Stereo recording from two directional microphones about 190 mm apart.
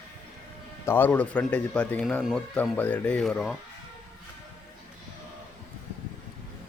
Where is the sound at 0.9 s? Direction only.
10° left (ahead or behind).